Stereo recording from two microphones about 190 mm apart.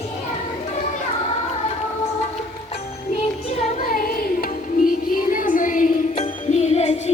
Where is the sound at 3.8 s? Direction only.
50° left (ahead or behind).